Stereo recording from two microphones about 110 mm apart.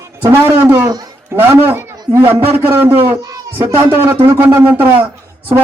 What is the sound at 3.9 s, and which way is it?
A man's voice, 20° right (ahead or behind).